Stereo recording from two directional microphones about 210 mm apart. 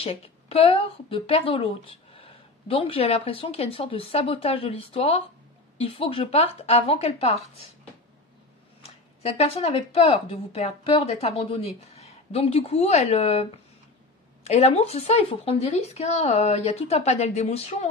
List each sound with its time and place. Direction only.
0.0 s a woman's voice: 30° left (ahead or behind)
9.2 s a woman's voice: 30° left (ahead or behind)